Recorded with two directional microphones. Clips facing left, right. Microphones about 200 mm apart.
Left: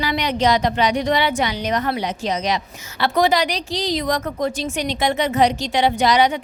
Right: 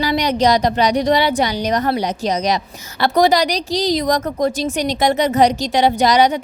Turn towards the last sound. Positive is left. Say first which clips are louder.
# right 3 dB
turn(degrees=-40)  # may be behind; listen again after turning